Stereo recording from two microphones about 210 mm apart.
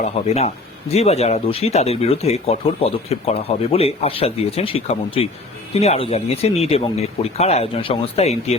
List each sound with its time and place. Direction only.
0.0 s speech: 30° left (ahead or behind)